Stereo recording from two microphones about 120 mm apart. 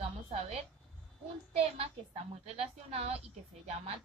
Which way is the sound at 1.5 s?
55° right (ahead or behind).